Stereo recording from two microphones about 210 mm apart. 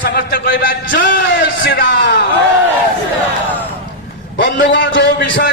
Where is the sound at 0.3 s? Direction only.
45° left (ahead or behind).